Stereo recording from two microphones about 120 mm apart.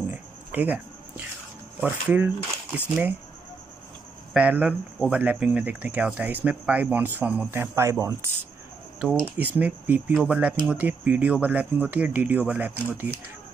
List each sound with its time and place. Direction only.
0.1 s a sound: 15° right (ahead or behind)
1.9 s speech: 15° right (ahead or behind)
4.3 s speech: 10° right (ahead or behind)
9.0 s speech: 15° right (ahead or behind)